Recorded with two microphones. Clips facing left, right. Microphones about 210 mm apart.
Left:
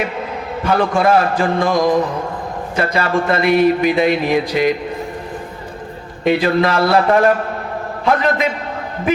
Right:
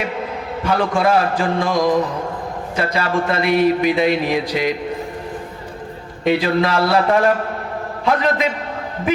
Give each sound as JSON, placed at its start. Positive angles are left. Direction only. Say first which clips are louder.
{"t": 0.6, "sound": "a man's voice", "louder": "left 2 dB", "side_deg": 50}
{"t": 6.2, "sound": "a man's voice", "louder": "left 2 dB", "side_deg": 55}